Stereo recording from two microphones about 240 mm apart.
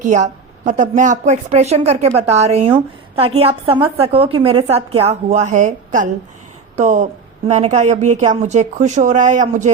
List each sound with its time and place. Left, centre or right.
0.0 s a woman's voice: right